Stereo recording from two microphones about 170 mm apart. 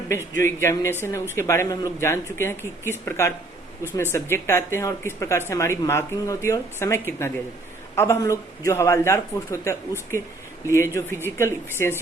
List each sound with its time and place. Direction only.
0.3 s speech: 15° left (ahead or behind)